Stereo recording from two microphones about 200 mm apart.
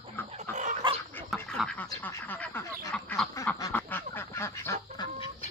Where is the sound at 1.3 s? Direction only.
5° left (ahead or behind).